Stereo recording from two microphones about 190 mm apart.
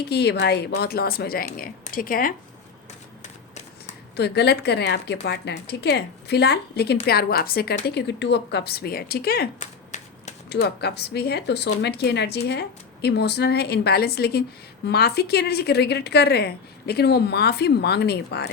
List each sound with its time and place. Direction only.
0.1 s speech: 60° left (ahead or behind)
4.2 s speech: 60° left (ahead or behind)
9.6 s shuffling cards: 40° left (ahead or behind)
10.5 s speech: 60° left (ahead or behind)